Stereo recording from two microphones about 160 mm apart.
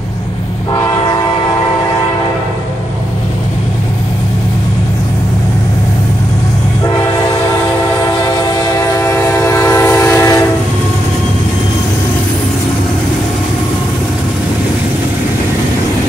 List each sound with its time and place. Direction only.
8.4 s train: 20° left (ahead or behind)